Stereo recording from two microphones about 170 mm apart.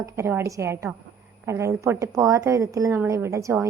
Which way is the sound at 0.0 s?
15° right (ahead or behind).